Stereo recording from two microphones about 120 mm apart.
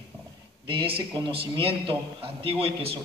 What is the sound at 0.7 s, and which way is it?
A man's voice, 50° right (ahead or behind).